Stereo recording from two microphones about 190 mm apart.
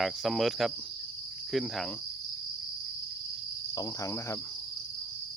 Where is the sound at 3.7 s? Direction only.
20° left (ahead or behind).